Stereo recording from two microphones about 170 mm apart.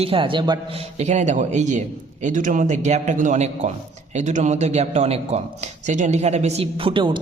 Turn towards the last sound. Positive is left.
turn(degrees=-30)  # may be behind; listen again after turning